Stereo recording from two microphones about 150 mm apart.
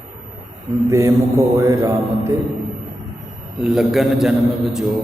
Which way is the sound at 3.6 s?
5° right (ahead or behind).